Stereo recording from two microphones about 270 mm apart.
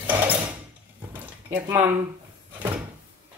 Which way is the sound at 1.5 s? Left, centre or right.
Centre.